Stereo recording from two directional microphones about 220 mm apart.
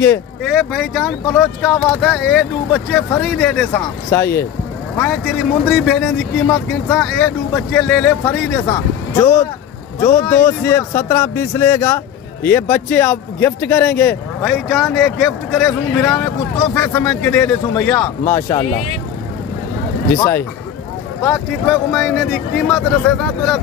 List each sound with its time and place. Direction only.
0.0 s speech: 5° left (ahead or behind)
8.5 s speech: 15° left (ahead or behind)
20.2 s speech: 10° left (ahead or behind)